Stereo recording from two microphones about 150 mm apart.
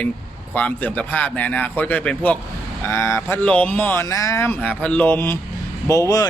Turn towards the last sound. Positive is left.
turn(degrees=25)  # may be behind; listen again after turning